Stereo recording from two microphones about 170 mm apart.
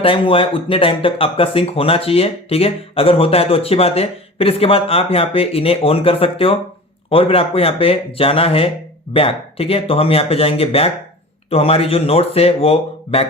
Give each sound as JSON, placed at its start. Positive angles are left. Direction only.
{"t": 0.0, "sound": "speech", "side_deg": 30}